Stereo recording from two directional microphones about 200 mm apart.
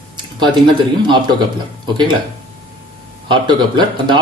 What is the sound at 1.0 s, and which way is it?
Speech, 20° right (ahead or behind).